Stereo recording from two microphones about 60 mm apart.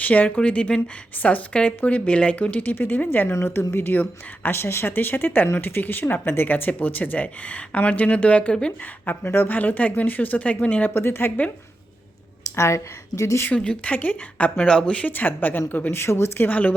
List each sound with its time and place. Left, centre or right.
0.0 s speech: left
2.7 s speech: left
3.4 s speech: left; by 8.7 s centre
9.2 s speech: left
10.9 s speech: left
12.5 s speech: left
13.5 s speech: centre
15.1 s speech: left
16.4 s speech: left